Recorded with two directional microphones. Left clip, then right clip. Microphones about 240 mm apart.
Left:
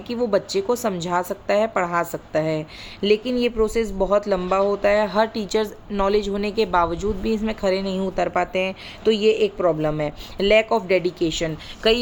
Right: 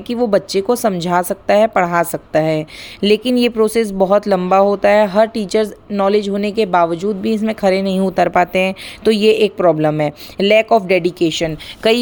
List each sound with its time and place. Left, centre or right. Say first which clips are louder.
0.1 s a woman's voice: right 6 dB; right